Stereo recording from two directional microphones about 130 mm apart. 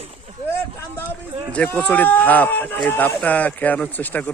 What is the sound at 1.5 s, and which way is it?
Speech, 10° left (ahead or behind).